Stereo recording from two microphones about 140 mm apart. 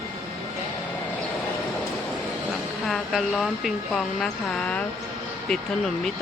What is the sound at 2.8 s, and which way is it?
A woman's voice, centre (ahead or behind).